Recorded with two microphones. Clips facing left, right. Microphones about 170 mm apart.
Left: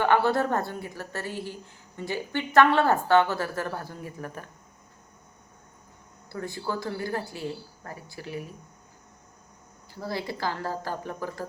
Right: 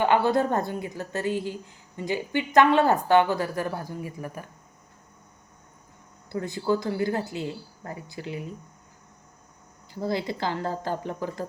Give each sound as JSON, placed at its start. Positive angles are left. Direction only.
{"t": 0.0, "sound": "a woman's voice", "side_deg": -15}
{"t": 6.3, "sound": "speech", "side_deg": -20}
{"t": 9.9, "sound": "speech", "side_deg": -20}